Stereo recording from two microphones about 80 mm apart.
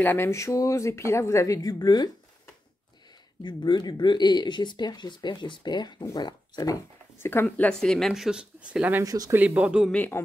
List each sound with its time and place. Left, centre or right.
0.0 s speech: left
3.4 s speech: left
7.2 s speech: left
7.8 s speech: centre
8.1 s speech: centre
9.0 s speech: right
9.3 s speech: right
9.6 s speech: centre
9.9 s speech: left